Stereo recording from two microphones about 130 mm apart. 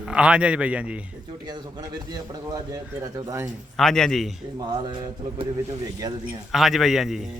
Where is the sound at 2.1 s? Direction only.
30° right (ahead or behind).